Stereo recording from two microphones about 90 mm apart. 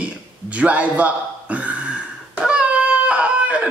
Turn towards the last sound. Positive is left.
turn(degrees=-15)  # may be behind; listen again after turning